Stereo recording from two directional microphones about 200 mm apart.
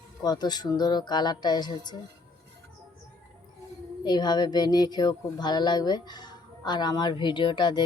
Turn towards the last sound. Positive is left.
turn(degrees=20)  # may be behind; listen again after turning